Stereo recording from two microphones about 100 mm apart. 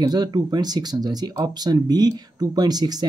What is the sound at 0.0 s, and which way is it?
Speech, 45° right (ahead or behind).